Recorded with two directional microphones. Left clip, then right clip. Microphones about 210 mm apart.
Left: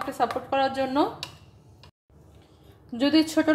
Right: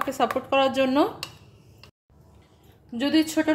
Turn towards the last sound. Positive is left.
turn(degrees=5)  # may be behind; listen again after turning